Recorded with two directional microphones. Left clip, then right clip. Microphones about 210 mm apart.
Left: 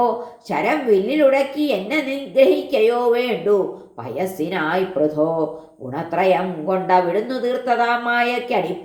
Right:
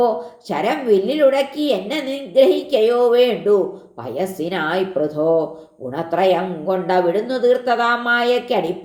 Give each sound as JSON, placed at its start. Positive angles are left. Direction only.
{"t": 0.5, "sound": "a woman's voice", "side_deg": -30}